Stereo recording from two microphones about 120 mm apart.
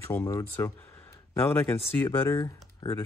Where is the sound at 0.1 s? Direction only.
25° left (ahead or behind).